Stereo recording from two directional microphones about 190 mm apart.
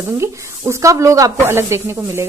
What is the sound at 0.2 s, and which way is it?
Speech, 15° right (ahead or behind).